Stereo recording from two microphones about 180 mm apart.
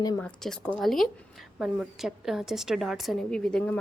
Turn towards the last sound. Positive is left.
turn(degrees=5)  # may be behind; listen again after turning